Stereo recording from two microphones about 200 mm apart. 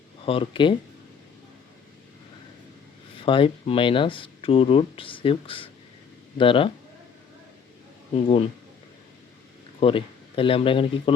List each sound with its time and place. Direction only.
0.3 s speech: 25° left (ahead or behind)
3.2 s speech: 25° left (ahead or behind)
8.1 s speech: 30° left (ahead or behind)
9.8 s speech: 25° left (ahead or behind)